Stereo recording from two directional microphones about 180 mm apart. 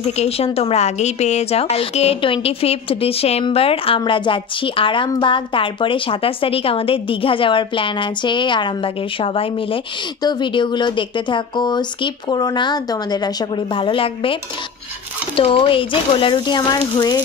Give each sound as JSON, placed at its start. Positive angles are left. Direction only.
{"t": 0.1, "sound": "a woman's voice", "side_deg": 35}